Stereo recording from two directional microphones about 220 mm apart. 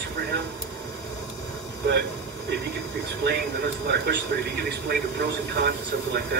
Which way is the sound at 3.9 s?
50° right (ahead or behind).